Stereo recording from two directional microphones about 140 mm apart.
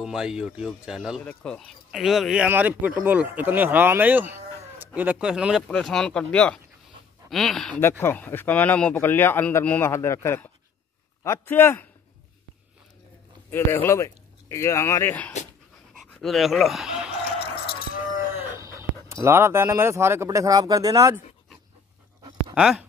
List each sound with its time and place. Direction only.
0.0 s speech: 5° right (ahead or behind)
1.2 s a man's voice: 10° left (ahead or behind)
8.0 s a man's voice: 15° left (ahead or behind)
13.5 s speech: 15° left (ahead or behind)
15.9 s dog: centre (ahead or behind)
18.4 s speech: 20° right (ahead or behind)
22.5 s dog: 5° right (ahead or behind)